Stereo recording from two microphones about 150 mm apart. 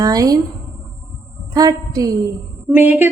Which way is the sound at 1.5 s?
25° right (ahead or behind).